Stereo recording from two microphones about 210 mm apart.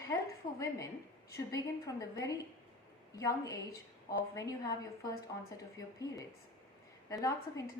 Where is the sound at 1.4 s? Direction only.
15° left (ahead or behind).